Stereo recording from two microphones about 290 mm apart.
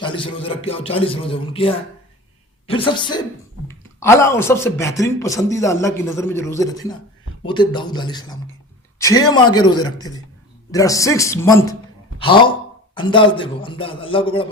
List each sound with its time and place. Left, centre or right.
0.0 s a man's voice: centre